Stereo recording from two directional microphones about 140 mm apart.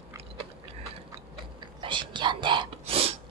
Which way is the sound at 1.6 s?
35° right (ahead or behind).